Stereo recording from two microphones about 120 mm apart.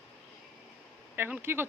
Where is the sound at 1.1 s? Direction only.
15° right (ahead or behind).